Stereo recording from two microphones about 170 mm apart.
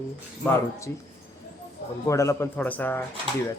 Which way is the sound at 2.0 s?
15° left (ahead or behind).